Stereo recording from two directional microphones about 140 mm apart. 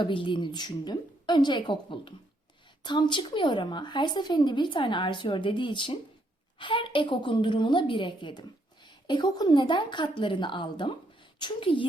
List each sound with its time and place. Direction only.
0.0 s a woman's voice: 35° left (ahead or behind)